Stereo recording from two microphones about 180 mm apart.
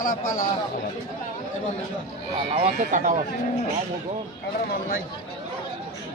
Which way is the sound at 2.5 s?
35° right (ahead or behind).